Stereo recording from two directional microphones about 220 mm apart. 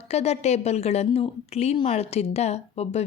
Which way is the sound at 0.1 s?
30° left (ahead or behind).